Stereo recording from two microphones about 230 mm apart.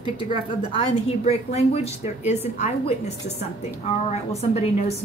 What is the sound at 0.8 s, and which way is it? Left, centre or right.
A woman's voice, left.